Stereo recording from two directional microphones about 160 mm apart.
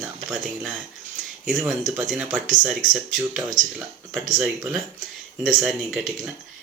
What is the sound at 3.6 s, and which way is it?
Speech, 55° right (ahead or behind).